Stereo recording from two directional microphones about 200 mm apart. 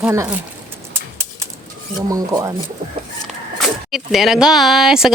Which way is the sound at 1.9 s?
20° right (ahead or behind).